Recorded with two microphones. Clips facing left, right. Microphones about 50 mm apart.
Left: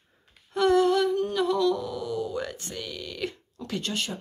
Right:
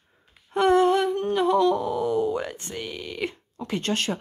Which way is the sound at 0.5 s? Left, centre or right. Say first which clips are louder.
Right 2 dB; right.